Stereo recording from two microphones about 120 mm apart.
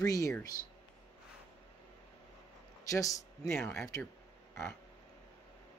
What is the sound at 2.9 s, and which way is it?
Speech, 25° left (ahead or behind).